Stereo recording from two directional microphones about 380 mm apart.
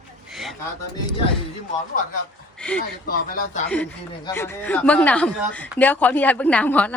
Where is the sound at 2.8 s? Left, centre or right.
Left.